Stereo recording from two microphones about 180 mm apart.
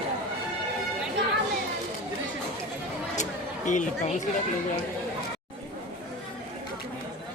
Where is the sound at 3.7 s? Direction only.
45° left (ahead or behind).